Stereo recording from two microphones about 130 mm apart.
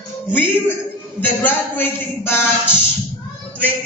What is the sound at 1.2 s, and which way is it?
Speech, 15° left (ahead or behind).